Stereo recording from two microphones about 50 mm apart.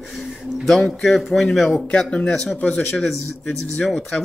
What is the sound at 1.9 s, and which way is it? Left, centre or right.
Speech, centre.